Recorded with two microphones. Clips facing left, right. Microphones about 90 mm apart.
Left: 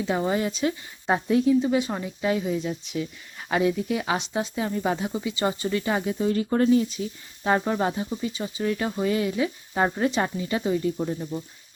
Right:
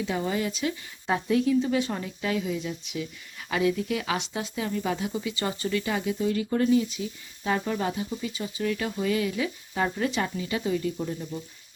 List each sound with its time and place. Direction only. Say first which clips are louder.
0.1 s speech: left 6 dB; 30° left (ahead or behind)